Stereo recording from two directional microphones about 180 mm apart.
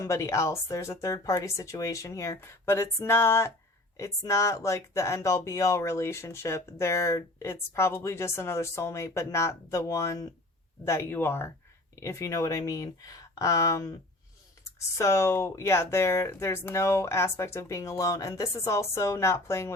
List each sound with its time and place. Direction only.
0.0 s speech: 15° left (ahead or behind)